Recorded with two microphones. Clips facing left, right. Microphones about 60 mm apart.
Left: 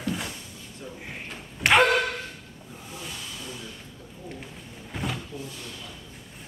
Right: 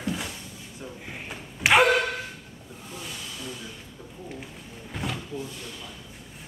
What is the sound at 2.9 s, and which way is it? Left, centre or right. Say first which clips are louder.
Hiss: even; centre.